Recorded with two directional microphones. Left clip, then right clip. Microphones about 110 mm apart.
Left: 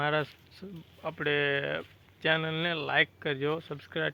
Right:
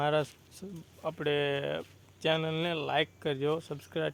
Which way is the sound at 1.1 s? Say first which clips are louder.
Left 2 dB; 20° right (ahead or behind).